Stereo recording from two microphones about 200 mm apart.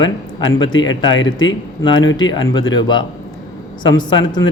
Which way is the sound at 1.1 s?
70° left (ahead or behind).